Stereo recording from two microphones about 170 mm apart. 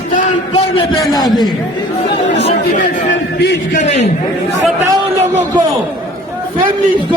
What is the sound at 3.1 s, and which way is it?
Speech, 85° left.